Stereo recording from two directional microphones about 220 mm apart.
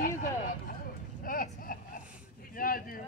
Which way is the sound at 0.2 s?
40° left (ahead or behind).